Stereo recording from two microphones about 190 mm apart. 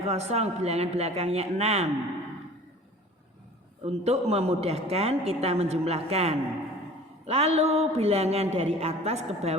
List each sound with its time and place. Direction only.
0.1 s a woman's voice: 35° right (ahead or behind)
3.8 s a woman's voice: 35° right (ahead or behind)